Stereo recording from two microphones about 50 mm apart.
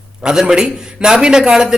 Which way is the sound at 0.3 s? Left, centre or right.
Centre.